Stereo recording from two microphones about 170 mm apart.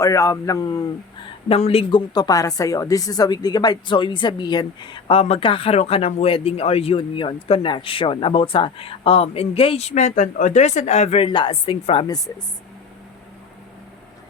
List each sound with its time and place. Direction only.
0.0 s a man's voice: 20° left (ahead or behind)
1.5 s speech: 35° left (ahead or behind)
1.9 s speech: 25° left (ahead or behind)